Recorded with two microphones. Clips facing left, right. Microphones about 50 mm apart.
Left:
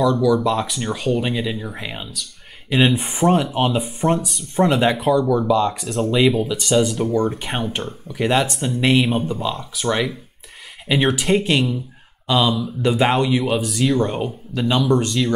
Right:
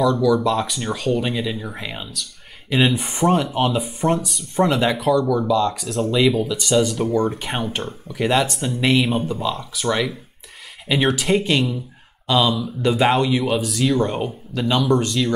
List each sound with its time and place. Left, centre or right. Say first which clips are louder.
0.0 s speech: even; centre
5.5 s speech: even; centre
5.8 s speech: left 1 dB; centre